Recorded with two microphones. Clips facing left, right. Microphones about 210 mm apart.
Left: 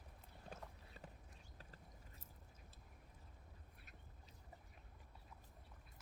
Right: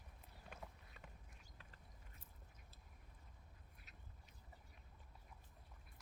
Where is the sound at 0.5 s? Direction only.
35° left (ahead or behind).